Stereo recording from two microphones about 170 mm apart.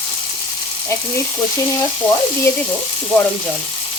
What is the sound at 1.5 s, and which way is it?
Frying, 20° left (ahead or behind).